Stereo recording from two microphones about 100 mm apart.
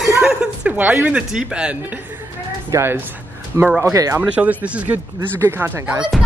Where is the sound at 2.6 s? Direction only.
30° right (ahead or behind).